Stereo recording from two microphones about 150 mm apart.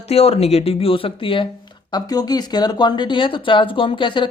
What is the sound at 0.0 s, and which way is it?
Speech, 45° left (ahead or behind).